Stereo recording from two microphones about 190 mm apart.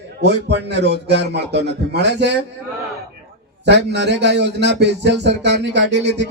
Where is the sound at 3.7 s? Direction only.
65° right (ahead or behind).